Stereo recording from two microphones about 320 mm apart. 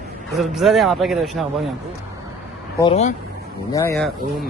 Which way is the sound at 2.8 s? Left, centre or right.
Centre.